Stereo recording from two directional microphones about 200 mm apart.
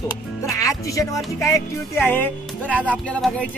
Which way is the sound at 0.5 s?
15° left (ahead or behind).